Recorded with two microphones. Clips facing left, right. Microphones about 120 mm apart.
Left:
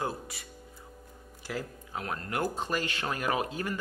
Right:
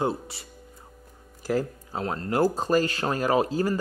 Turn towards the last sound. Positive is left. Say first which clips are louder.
# right 8 dB
turn(degrees=-35)  # may be behind; listen again after turning